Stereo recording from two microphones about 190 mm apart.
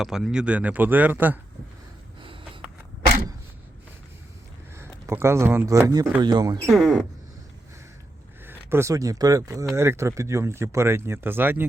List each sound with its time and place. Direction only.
0.0 s speech: centre (ahead or behind)
4.7 s speech: 15° right (ahead or behind)
6.7 s speech: centre (ahead or behind)
8.4 s speech: 15° right (ahead or behind)